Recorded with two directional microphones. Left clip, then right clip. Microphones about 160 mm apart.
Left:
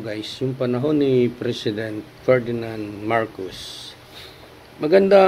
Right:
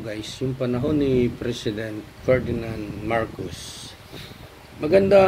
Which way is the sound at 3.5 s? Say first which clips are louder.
Left 3 dB; 35° left (ahead or behind).